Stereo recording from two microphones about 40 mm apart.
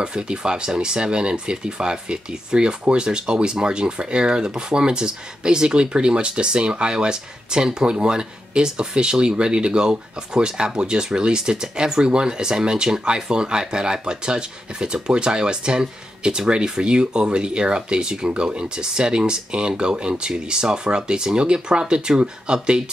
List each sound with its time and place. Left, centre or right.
0.0 s speech: right